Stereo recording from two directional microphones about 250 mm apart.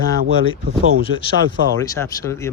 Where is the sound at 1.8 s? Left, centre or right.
Centre.